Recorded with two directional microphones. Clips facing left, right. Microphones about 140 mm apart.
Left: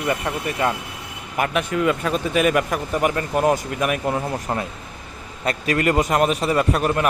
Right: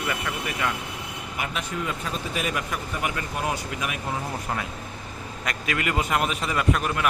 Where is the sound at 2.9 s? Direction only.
45° left (ahead or behind).